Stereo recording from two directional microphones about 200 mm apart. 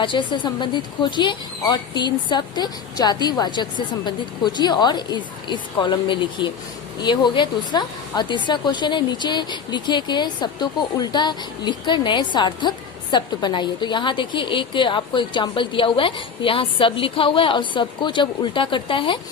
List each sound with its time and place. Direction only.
0.0 s a woman's voice: 25° left (ahead or behind)